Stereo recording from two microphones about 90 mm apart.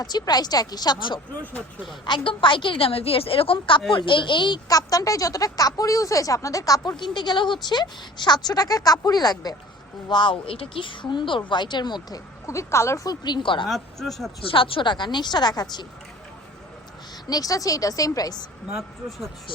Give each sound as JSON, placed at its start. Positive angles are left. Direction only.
{"t": 0.0, "sound": "a woman's voice", "side_deg": 50}
{"t": 4.7, "sound": "speech", "side_deg": 40}
{"t": 6.9, "sound": "speech", "side_deg": 60}
{"t": 10.1, "sound": "speech", "side_deg": 60}
{"t": 12.5, "sound": "speech", "side_deg": 35}
{"t": 13.1, "sound": "speech", "side_deg": 55}
{"t": 13.7, "sound": "speech", "side_deg": 0}
{"t": 14.4, "sound": "speech", "side_deg": 80}
{"t": 17.2, "sound": "speech", "side_deg": 45}